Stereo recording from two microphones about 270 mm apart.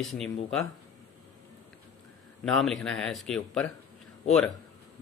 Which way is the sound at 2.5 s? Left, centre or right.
Centre.